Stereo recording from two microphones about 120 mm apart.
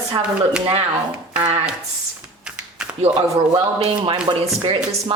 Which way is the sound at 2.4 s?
10° right (ahead or behind).